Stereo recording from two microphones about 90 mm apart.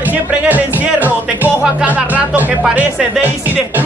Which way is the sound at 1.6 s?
15° right (ahead or behind).